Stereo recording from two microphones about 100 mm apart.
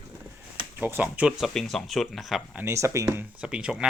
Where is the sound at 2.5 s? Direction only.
30° right (ahead or behind).